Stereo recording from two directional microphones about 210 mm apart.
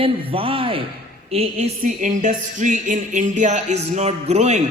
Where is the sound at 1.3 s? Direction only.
30° right (ahead or behind).